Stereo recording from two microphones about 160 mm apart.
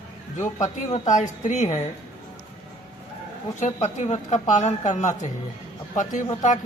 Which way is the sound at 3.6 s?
45° left (ahead or behind).